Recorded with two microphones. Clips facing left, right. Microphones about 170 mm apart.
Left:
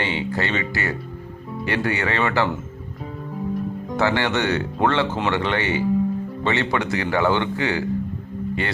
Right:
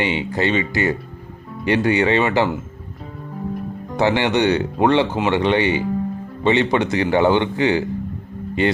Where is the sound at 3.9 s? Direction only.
20° right (ahead or behind).